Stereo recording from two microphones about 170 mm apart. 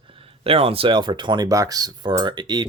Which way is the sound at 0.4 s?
35° right (ahead or behind).